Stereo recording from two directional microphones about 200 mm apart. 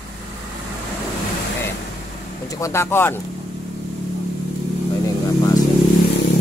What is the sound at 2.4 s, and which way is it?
Speech, 15° left (ahead or behind).